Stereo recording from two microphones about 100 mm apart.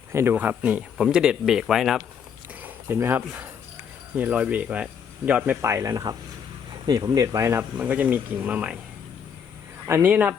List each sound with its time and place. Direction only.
0.1 s speech: 25° right (ahead or behind); by 2.0 s 5° right (ahead or behind)
2.6 s speech: 20° right (ahead or behind)
5.6 s speech: 30° right (ahead or behind)
7.8 s speech: 15° right (ahead or behind)
9.8 s speech: 20° right (ahead or behind)